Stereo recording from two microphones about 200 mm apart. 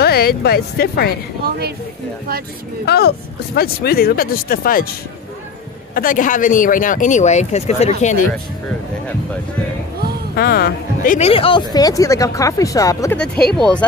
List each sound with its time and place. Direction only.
0.0 s speech: 50° left (ahead or behind)
2.8 s speech: 55° left (ahead or behind)
5.9 s speech: 45° left (ahead or behind)
10.3 s speech: 50° left (ahead or behind)
11.1 s speech: 30° left (ahead or behind)
13.6 s speech: 5° left (ahead or behind)